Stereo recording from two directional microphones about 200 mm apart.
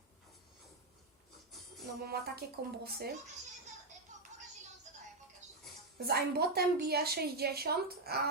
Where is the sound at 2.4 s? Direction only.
50° right (ahead or behind).